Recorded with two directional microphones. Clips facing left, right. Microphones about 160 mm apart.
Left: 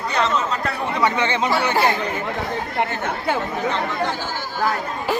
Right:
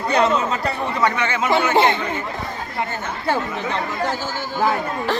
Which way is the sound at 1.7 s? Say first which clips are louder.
Right 5 dB; 25° right (ahead or behind).